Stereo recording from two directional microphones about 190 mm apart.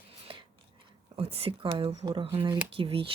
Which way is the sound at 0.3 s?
25° right (ahead or behind).